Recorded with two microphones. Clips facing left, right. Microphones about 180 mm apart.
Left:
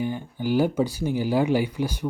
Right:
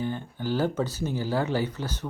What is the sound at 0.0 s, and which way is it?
Speech, 15° left (ahead or behind).